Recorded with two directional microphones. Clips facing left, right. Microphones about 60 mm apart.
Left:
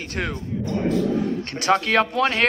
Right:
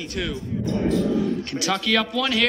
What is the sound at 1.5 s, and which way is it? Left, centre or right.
Speech, left.